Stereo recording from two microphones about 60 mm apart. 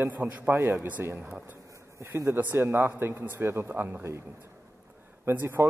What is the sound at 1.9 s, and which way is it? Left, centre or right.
Speech, right.